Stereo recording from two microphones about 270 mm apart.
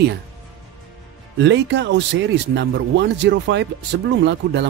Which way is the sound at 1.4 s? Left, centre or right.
Right.